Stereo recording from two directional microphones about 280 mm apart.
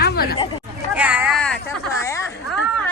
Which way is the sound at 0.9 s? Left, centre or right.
Centre.